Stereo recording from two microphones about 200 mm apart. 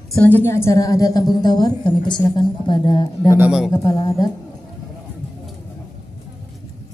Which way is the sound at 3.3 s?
5° right (ahead or behind).